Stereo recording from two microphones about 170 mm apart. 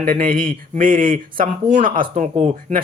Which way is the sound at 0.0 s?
55° right (ahead or behind).